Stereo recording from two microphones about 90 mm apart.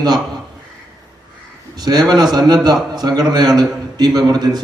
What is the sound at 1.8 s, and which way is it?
A man's voice, 50° right (ahead or behind).